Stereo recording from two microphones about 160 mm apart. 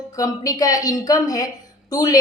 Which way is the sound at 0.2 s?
20° left (ahead or behind).